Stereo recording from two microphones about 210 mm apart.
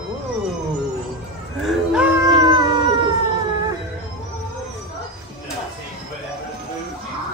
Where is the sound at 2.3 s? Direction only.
20° right (ahead or behind).